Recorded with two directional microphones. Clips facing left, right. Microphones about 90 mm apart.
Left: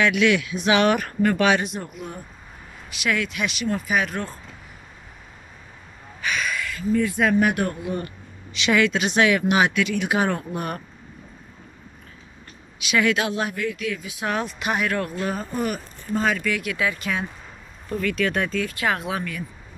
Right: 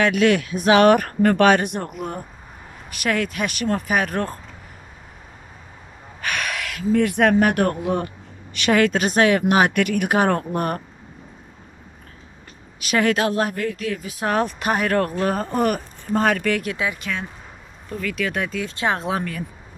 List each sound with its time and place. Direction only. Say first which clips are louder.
0.0 s speech: right 2 dB; 40° right (ahead or behind)
6.2 s speech: even; 65° right (ahead or behind)
8.5 s speech: right 2 dB; 45° right (ahead or behind)
12.8 s speech: right 2 dB; 45° right (ahead or behind)
16.7 s speech: even; 20° right (ahead or behind)
17.0 s speech: left 1 dB; 10° left (ahead or behind)
18.0 s speech: left 1 dB; centre (ahead or behind)
18.6 s speech: right 1 dB; 25° right (ahead or behind)